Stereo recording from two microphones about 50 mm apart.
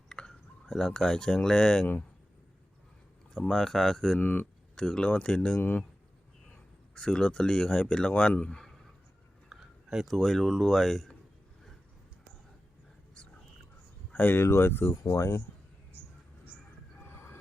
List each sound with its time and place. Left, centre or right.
0.1 s speech: centre
3.3 s speech: centre
4.2 s speech: left
4.7 s speech: centre
9.5 s a sound: centre
10.1 s speech: centre
14.1 s speech: left
14.3 s speech: left
15.0 s speech: left
17.0 s a sound: left